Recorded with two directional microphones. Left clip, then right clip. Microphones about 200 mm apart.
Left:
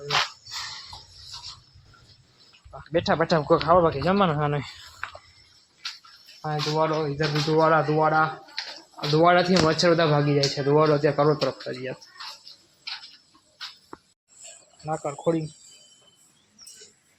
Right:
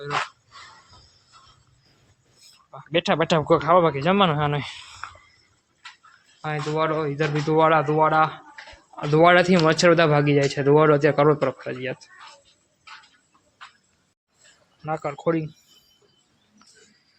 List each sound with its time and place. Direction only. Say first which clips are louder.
2.7 s speech: right 2 dB; 35° right (ahead or behind)
3.6 s speech: right 1 dB; 20° right (ahead or behind)
5.0 s a sound: left 3 dB; 25° left (ahead or behind)
6.4 s speech: even; 25° right (ahead or behind)
14.8 s speech: right 1 dB; 10° right (ahead or behind)